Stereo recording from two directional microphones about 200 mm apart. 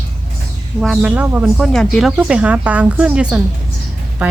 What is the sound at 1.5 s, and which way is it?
A woman's voice, 5° left (ahead or behind).